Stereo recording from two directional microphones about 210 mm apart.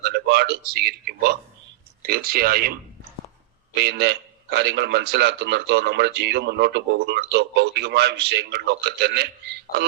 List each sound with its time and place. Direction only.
0.0 s a man's voice: 50° right (ahead or behind)
3.8 s a man's voice: 50° right (ahead or behind)